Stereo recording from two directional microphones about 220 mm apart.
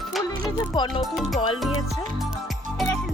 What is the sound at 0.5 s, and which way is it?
Speech, 20° left (ahead or behind).